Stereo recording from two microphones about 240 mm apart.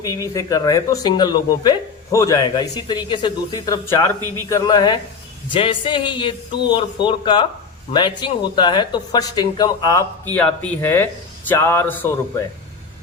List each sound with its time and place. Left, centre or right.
0.0 s speech: centre